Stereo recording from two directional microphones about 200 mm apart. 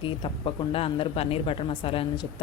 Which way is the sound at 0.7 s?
30° left (ahead or behind).